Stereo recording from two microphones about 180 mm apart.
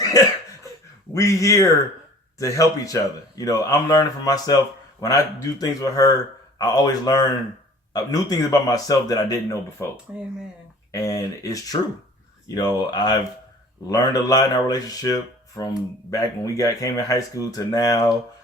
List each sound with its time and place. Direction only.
0.1 s speech: 20° left (ahead or behind)
10.1 s speech: 10° right (ahead or behind)
10.9 s speech: 20° left (ahead or behind)